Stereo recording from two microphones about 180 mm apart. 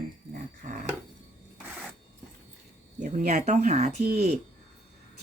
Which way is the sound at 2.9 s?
45° right (ahead or behind).